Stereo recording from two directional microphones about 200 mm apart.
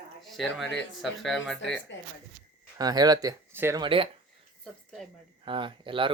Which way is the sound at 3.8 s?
25° right (ahead or behind).